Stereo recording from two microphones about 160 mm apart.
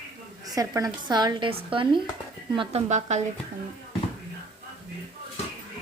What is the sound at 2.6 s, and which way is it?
Speech, 40° right (ahead or behind).